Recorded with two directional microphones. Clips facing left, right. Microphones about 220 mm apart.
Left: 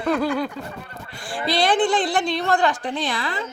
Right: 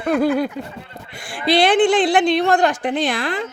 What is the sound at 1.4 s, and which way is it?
A woman's voice, 70° right (ahead or behind).